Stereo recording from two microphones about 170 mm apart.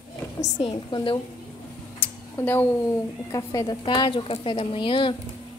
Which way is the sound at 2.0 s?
10° left (ahead or behind).